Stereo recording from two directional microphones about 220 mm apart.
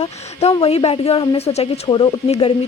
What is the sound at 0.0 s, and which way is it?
Speech, 30° left (ahead or behind).